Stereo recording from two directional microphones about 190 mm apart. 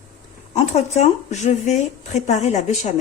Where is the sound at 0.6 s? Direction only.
35° left (ahead or behind).